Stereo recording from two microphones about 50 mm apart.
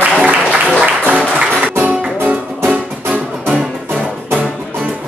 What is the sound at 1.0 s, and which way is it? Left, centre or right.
Music, right.